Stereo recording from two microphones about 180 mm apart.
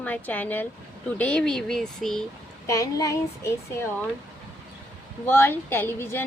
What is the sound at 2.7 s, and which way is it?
A woman's voice, 20° left (ahead or behind).